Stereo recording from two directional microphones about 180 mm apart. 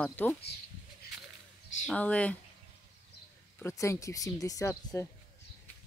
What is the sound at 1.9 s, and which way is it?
Speech, 5° left (ahead or behind).